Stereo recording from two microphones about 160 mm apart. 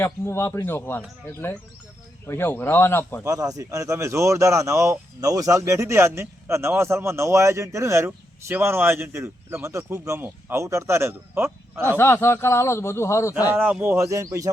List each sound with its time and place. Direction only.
0.0 s speech: 15° left (ahead or behind)
3.2 s speech: 20° right (ahead or behind)
11.9 s speech: 15° left (ahead or behind)
13.5 s speech: 10° right (ahead or behind)